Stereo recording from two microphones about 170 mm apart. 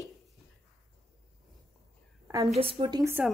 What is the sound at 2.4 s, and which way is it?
Speech, 35° right (ahead or behind).